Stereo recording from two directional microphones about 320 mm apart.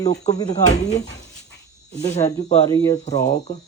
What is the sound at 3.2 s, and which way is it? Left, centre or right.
Speech, left.